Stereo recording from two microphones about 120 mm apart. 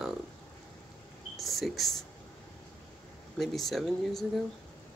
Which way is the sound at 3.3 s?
Centre (ahead or behind).